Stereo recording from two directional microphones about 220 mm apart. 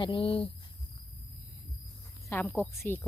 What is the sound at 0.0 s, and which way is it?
Speech, 25° left (ahead or behind).